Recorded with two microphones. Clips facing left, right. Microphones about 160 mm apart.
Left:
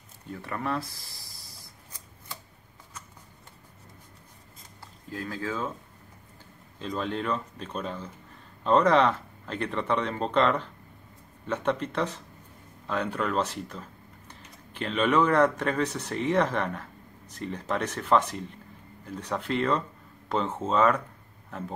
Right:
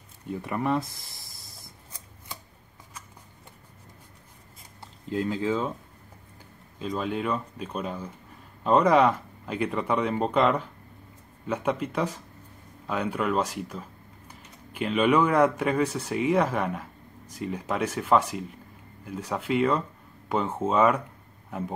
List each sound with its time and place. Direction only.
0.3 s speech: 15° right (ahead or behind)
5.1 s speech: 20° right (ahead or behind)
6.8 s speech: 5° right (ahead or behind)